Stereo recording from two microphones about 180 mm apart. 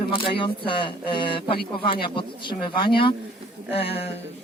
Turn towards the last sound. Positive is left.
turn(degrees=35)  # may be behind; listen again after turning